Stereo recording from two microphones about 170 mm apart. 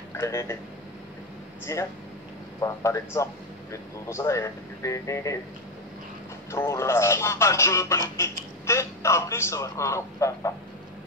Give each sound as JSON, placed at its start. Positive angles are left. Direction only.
{"t": 0.2, "sound": "speech", "side_deg": 15}
{"t": 1.7, "sound": "speech", "side_deg": 20}
{"t": 6.5, "sound": "speech", "side_deg": 15}